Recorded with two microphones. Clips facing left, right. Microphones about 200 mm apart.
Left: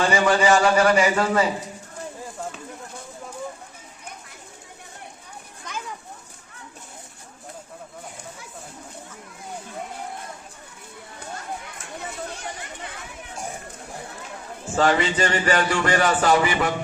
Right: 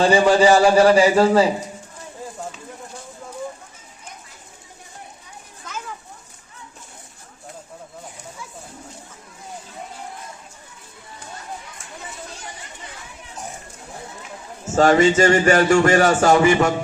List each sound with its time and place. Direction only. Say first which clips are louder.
0.0 s a man's voice: right 5 dB; 30° right (ahead or behind)
14.7 s a man's voice: right 6 dB; 45° right (ahead or behind)